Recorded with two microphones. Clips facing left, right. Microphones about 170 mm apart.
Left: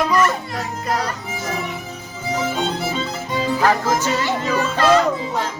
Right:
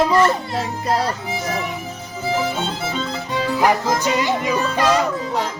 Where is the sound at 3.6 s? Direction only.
15° right (ahead or behind).